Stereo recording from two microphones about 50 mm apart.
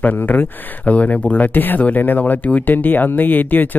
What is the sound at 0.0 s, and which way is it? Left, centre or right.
Speech, left.